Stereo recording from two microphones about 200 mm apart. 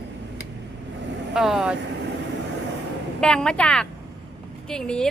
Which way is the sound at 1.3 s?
Centre (ahead or behind).